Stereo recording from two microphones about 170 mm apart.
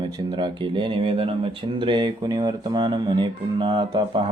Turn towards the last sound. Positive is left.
turn(degrees=-30)  # may be behind; listen again after turning